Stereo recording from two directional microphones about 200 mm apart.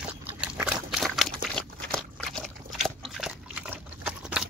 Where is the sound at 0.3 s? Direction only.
5° right (ahead or behind).